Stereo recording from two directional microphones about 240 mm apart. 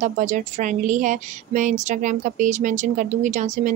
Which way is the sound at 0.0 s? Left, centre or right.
Right.